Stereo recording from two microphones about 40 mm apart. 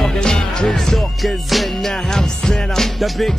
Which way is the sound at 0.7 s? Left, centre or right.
Centre.